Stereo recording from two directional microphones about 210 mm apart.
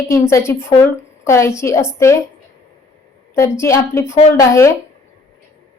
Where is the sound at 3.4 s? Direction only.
15° left (ahead or behind).